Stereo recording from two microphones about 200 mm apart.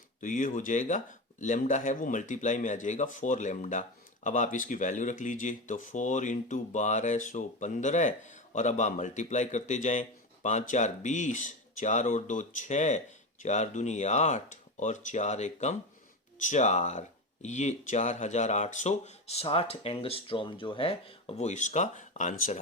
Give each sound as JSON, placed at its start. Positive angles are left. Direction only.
{"t": 0.2, "sound": "speech", "side_deg": 40}